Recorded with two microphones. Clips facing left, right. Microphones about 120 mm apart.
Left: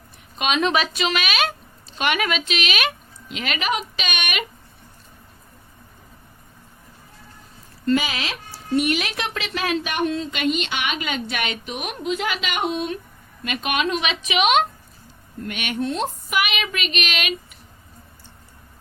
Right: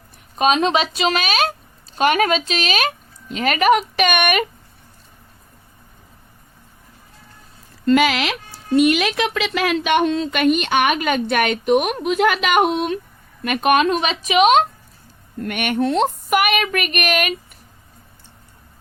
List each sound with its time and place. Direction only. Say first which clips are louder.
0.3 s speech: right 4 dB; 35° right (ahead or behind); by 4.4 s 55° right (ahead or behind)
7.9 s speech: right 7 dB; 80° right
13.4 s speech: right 8 dB; 50° right (ahead or behind)
15.4 s speech: right 6 dB; 55° right (ahead or behind)